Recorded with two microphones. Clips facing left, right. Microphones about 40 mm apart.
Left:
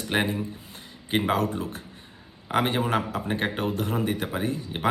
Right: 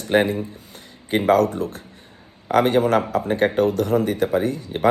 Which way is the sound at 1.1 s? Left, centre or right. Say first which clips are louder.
Right 8 dB; left.